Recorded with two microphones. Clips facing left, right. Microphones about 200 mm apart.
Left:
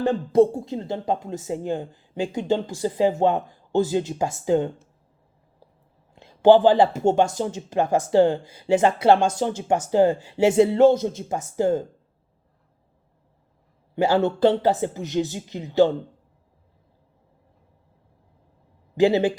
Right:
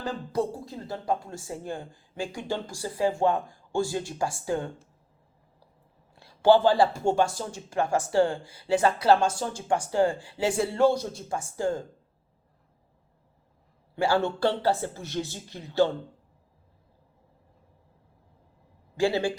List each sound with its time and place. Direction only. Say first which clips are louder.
0.0 s speech: left 11 dB; 25° left (ahead or behind)
6.1 s speech: left 5 dB; 20° left (ahead or behind)
13.9 s speech: left 5 dB; 20° left (ahead or behind)
18.9 s speech: left 7 dB; 20° left (ahead or behind)